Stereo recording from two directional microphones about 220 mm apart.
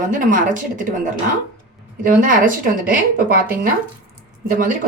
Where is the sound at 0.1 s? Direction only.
35° right (ahead or behind).